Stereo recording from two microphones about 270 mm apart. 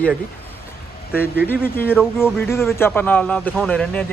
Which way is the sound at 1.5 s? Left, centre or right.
Centre.